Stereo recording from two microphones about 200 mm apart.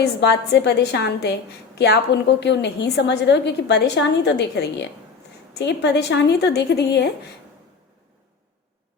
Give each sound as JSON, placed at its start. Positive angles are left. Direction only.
{"t": 0.0, "sound": "a woman's voice", "side_deg": 55}